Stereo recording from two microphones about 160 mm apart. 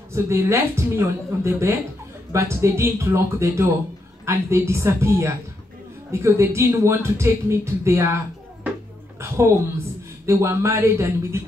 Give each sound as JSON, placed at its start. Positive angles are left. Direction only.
{"t": 0.1, "sound": "speech", "side_deg": -15}
{"t": 10.2, "sound": "speech", "side_deg": -15}